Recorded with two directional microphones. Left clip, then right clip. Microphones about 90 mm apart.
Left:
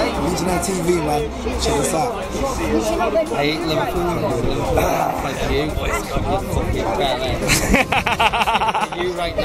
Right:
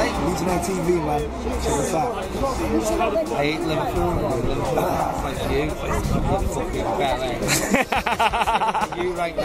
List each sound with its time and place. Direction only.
3.3 s speech: 5° right (ahead or behind)
4.7 s a man's voice: 25° left (ahead or behind)
7.0 s speech: 5° right (ahead or behind)